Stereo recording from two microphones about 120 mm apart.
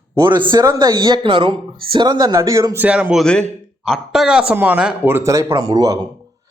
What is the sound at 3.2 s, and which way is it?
Speech, 5° left (ahead or behind).